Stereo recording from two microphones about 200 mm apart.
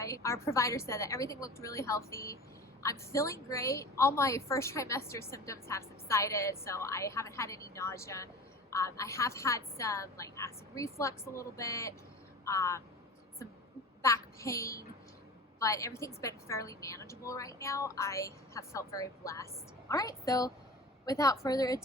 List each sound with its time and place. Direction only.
0.0 s a woman's voice: 15° left (ahead or behind)
14.0 s a woman's voice: 15° left (ahead or behind)